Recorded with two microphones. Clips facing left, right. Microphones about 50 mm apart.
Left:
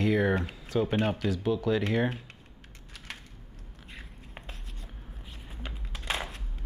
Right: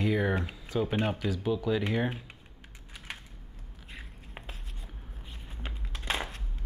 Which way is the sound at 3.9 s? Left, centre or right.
Centre.